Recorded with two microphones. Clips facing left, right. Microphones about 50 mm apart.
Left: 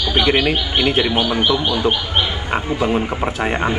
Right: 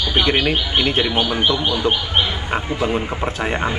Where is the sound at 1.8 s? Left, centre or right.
Centre.